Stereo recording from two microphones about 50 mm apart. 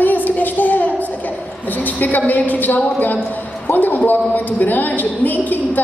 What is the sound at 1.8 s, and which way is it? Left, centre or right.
A man's voice, left.